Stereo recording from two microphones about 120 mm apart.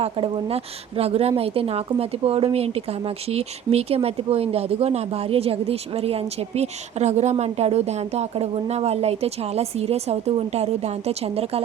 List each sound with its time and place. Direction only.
0.0 s a woman's voice: 55° right (ahead or behind)